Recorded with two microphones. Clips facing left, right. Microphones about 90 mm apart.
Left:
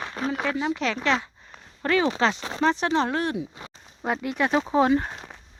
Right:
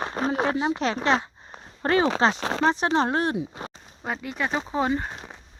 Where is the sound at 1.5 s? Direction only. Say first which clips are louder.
Right 1 dB; 35° right (ahead or behind).